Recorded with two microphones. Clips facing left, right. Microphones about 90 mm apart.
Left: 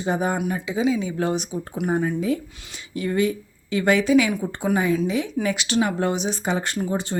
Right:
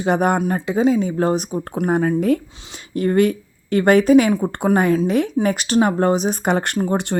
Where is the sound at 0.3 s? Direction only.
50° right (ahead or behind).